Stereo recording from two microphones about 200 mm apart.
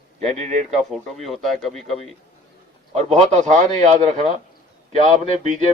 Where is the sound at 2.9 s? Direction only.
35° right (ahead or behind).